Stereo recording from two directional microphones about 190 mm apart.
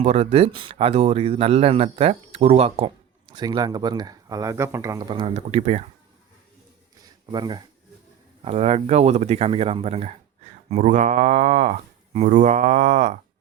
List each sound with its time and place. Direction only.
0.0 s speech: 35° right (ahead or behind)
7.3 s speech: 20° right (ahead or behind); by 13.1 s 40° right (ahead or behind)